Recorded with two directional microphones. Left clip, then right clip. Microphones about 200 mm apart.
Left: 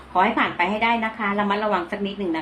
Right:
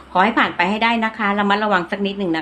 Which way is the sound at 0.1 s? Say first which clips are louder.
Right 4 dB; 40° right (ahead or behind).